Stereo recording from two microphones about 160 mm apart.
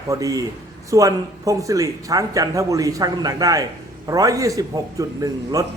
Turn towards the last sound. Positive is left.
turn(degrees=-20)  # may be behind; listen again after turning